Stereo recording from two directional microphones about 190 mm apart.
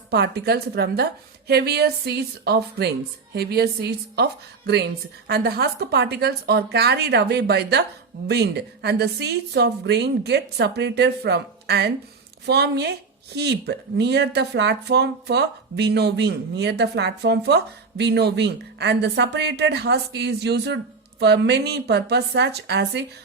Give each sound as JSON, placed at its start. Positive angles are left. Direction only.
{"t": 0.1, "sound": "speech", "side_deg": -60}